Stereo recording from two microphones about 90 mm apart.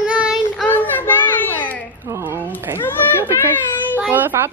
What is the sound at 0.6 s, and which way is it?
A child's voice, 20° left (ahead or behind).